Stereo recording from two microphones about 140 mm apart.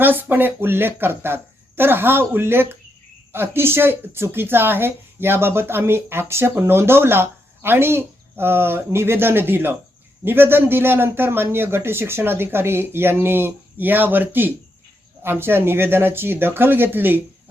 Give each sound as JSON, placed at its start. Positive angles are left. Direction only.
{"t": 0.0, "sound": "a woman's voice", "side_deg": -15}